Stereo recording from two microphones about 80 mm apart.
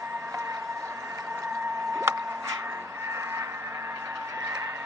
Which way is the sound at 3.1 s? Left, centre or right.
Right.